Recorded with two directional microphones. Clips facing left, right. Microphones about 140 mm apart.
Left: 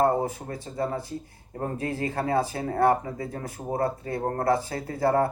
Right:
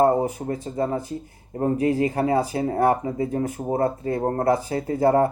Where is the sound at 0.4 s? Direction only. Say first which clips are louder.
Right 5 dB; 25° right (ahead or behind).